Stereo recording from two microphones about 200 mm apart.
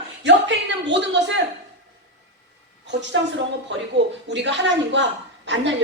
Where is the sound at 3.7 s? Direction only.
65° right (ahead or behind).